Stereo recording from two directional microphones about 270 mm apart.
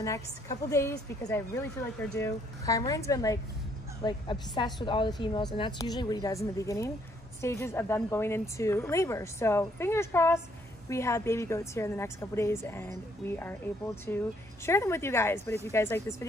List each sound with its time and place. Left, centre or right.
0.0 s speech: centre
14.1 s speech: centre